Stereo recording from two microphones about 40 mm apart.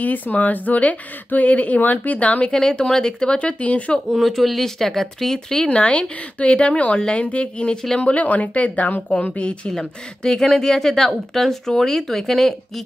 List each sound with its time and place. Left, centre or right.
0.0 s speech: left
2.7 s a woman's voice: centre
3.3 s speech: left
4.1 s speech: centre
5.7 s a woman's voice: left
9.8 s speech: centre